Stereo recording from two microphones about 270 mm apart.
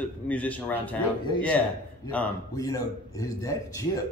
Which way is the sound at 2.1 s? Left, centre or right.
Centre.